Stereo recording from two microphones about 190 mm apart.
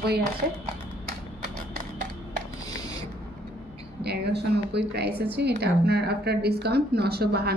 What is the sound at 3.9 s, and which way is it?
A woman's voice, 60° right (ahead or behind).